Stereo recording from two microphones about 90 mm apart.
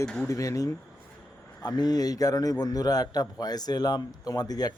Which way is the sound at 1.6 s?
50° left (ahead or behind).